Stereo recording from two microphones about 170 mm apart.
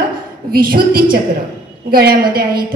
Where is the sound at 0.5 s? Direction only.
60° right (ahead or behind).